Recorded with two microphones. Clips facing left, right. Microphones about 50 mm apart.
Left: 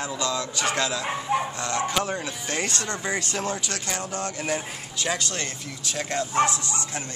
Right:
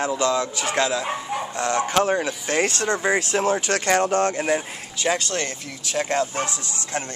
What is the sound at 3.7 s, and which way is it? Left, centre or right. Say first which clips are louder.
Speech: right 11 dB; right.